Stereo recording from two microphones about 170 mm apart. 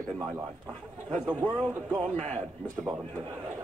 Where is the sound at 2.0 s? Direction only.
45° right (ahead or behind).